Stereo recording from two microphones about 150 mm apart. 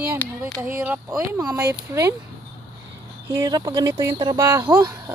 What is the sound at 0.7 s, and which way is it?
Speech, 15° right (ahead or behind).